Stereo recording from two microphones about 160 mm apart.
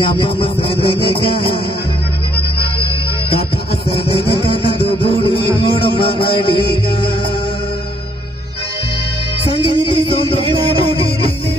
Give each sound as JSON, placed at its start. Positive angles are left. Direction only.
{"t": 0.0, "sound": "music", "side_deg": 35}
{"t": 3.9, "sound": "music", "side_deg": 35}
{"t": 9.6, "sound": "music", "side_deg": -30}